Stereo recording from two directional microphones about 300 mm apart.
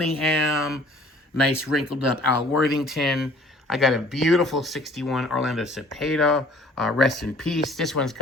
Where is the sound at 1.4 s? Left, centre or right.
Left.